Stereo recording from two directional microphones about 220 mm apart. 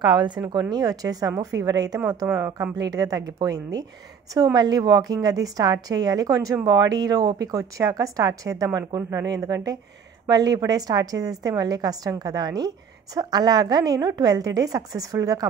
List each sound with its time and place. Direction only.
0.0 s a woman's voice: 20° right (ahead or behind)